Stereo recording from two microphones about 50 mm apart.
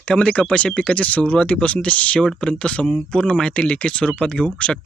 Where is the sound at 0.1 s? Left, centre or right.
Centre.